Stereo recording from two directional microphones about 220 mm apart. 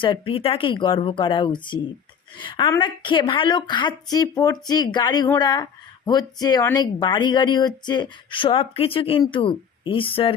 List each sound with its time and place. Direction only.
0.0 s speech: 25° left (ahead or behind)